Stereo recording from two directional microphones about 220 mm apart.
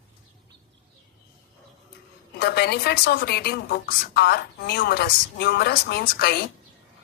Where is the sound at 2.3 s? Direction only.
45° left (ahead or behind).